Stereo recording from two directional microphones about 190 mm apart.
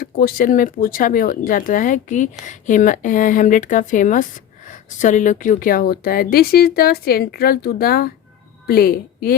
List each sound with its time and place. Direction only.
0.0 s a woman's voice: 50° left (ahead or behind)